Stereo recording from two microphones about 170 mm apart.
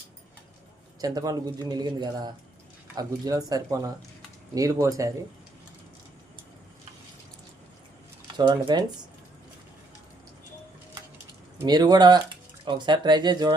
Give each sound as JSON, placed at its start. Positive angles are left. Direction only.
{"t": 1.0, "sound": "speech", "side_deg": -20}
{"t": 8.4, "sound": "speech", "side_deg": -25}
{"t": 11.6, "sound": "speech", "side_deg": -25}